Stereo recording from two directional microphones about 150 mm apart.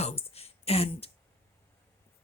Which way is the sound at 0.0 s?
40° left (ahead or behind).